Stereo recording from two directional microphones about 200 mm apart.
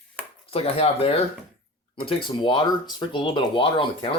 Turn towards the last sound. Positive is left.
turn(degrees=25)  # may be behind; listen again after turning